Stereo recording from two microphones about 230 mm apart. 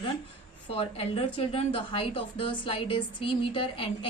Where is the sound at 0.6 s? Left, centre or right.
Left.